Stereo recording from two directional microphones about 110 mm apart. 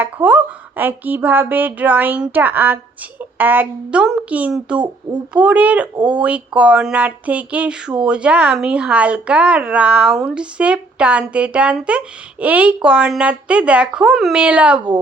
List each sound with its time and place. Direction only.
0.0 s speech: 15° right (ahead or behind)